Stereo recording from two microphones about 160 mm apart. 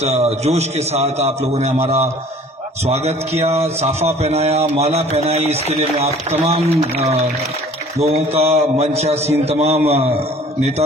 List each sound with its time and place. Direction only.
0.0 s a man's voice: 40° right (ahead or behind)